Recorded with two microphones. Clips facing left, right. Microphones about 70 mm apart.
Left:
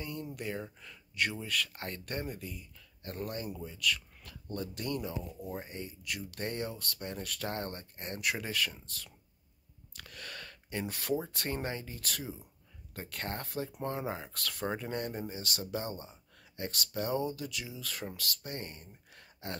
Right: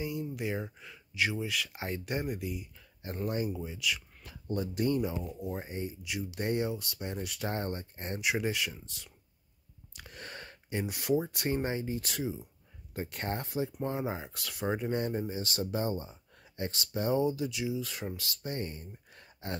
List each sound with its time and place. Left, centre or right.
0.0 s speech: centre
5.4 s speech: centre
5.7 s speech: right